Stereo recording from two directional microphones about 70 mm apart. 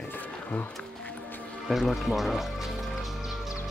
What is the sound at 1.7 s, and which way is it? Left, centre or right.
Music, centre.